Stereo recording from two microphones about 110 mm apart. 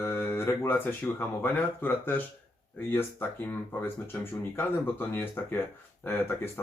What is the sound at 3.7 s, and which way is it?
Speech, 20° left (ahead or behind).